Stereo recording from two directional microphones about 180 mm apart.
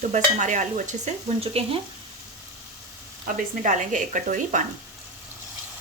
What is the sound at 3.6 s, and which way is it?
A woman's voice, 45° right (ahead or behind).